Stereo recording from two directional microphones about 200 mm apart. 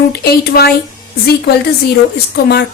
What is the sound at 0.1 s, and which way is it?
Speech, 50° left (ahead or behind).